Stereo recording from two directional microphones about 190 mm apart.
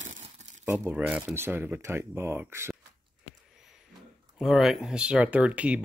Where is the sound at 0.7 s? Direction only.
10° right (ahead or behind).